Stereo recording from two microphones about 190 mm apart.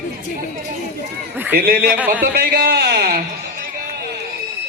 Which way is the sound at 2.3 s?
55° right (ahead or behind).